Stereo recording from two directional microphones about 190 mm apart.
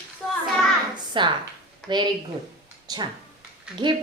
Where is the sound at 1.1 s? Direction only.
25° right (ahead or behind).